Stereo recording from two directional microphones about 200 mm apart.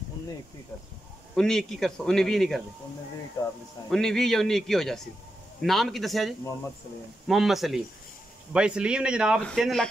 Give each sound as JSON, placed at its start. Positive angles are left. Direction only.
{"t": 1.3, "sound": "a man's voice", "side_deg": 0}
{"t": 3.9, "sound": "a man's voice", "side_deg": 0}